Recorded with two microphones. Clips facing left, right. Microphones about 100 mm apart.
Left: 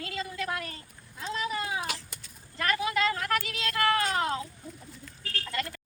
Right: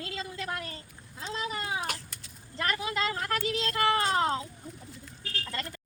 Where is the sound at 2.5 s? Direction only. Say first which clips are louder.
Left 3 dB; 25° right (ahead or behind).